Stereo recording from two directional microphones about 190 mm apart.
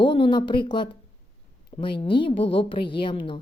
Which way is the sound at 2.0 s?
25° left (ahead or behind).